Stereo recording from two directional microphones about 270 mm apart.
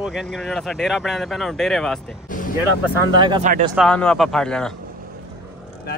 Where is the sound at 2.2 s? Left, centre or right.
Left.